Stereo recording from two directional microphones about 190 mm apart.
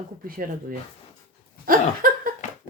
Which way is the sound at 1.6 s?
50° right (ahead or behind).